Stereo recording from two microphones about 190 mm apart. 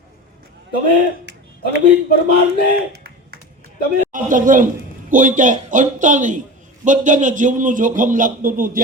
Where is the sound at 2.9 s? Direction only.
55° right (ahead or behind).